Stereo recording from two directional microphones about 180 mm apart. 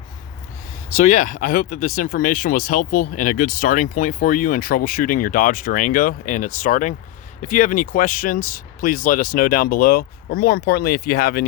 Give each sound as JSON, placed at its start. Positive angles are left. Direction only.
{"t": 0.9, "sound": "speech", "side_deg": 45}